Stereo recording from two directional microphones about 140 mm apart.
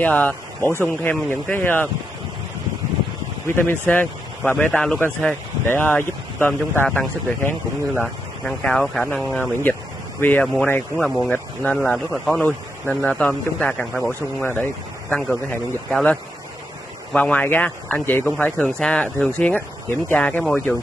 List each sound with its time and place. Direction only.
0.0 s speech: 10° left (ahead or behind)
3.4 s speech: 15° left (ahead or behind)
9.4 s speech: 15° left (ahead or behind)